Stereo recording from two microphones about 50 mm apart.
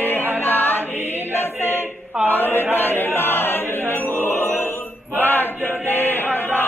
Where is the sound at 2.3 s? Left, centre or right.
Left.